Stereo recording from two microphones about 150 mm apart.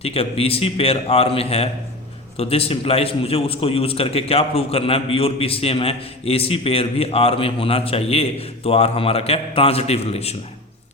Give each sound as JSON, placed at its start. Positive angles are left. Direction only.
{"t": 0.0, "sound": "a man's voice", "side_deg": 40}